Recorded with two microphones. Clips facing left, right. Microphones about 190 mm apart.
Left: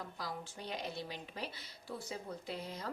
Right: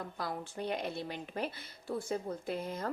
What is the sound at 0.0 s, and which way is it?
Speech, 55° right (ahead or behind).